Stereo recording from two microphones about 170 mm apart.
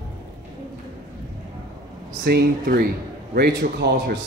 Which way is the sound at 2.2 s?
70° right (ahead or behind).